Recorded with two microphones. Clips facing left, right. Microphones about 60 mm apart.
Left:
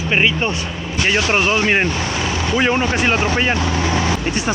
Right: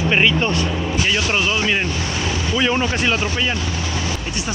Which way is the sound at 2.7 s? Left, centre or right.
Left.